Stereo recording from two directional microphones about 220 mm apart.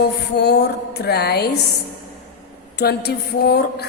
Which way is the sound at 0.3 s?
50° left (ahead or behind).